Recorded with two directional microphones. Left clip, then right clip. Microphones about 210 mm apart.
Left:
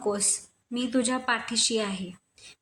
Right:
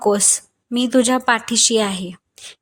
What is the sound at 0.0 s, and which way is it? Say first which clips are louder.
A woman's voice: right 11 dB; 40° right (ahead or behind).